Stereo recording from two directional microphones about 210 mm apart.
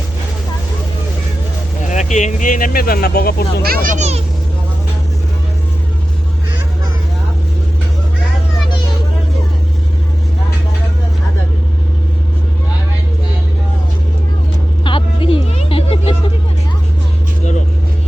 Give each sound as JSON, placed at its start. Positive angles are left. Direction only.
{"t": 1.8, "sound": "speech", "side_deg": 35}
{"t": 3.6, "sound": "a child's voice", "side_deg": -45}
{"t": 14.8, "sound": "vehicle", "side_deg": 25}